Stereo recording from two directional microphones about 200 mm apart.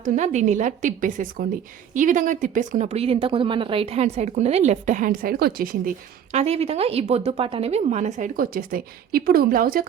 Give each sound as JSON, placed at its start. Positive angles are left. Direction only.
{"t": 0.0, "sound": "speech", "side_deg": -40}
{"t": 6.3, "sound": "speech", "side_deg": -30}